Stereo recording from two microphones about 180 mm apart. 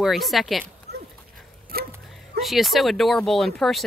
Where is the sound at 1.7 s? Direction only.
55° right (ahead or behind).